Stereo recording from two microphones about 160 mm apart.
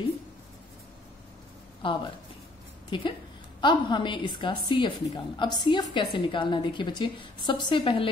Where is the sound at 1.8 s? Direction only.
30° left (ahead or behind).